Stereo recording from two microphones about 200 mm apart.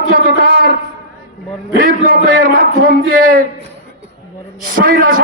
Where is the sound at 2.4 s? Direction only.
45° right (ahead or behind).